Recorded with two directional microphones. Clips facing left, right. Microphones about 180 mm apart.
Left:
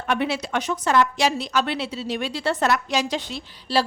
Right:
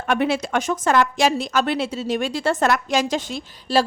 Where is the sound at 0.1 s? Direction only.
50° right (ahead or behind).